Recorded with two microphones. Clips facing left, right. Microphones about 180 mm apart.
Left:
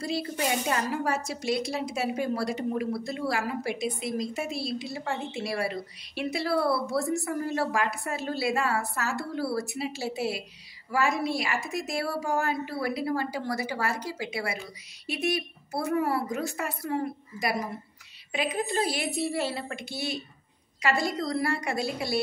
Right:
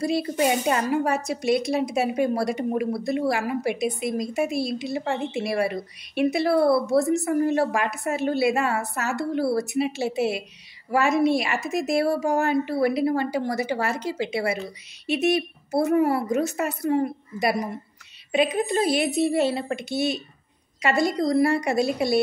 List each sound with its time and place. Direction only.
0.0 s a woman's voice: 20° right (ahead or behind)